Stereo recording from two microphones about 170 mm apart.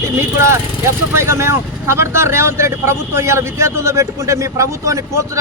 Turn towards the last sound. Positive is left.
turn(degrees=-15)  # may be behind; listen again after turning